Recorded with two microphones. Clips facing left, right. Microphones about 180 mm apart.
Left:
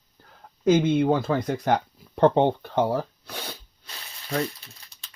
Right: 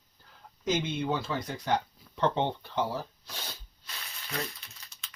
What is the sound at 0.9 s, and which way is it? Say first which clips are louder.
Speech: left 10 dB; 55° left (ahead or behind).